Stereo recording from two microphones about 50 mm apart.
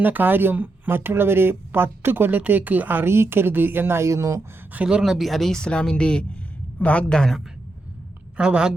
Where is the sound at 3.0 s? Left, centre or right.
Right.